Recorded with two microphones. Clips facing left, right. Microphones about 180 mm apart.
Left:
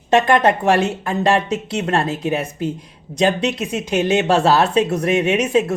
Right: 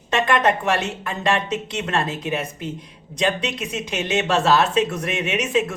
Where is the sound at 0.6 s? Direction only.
35° left (ahead or behind).